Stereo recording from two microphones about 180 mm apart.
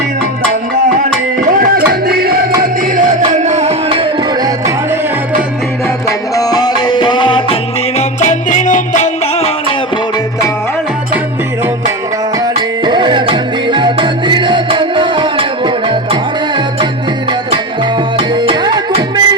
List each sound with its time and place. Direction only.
1.5 s music: 50° right (ahead or behind)
2.9 s music: 40° right (ahead or behind)
6.1 s music: 20° left (ahead or behind)
7.9 s music: 40° left (ahead or behind)
12.8 s music: 25° right (ahead or behind)
18.2 s music: 30° right (ahead or behind)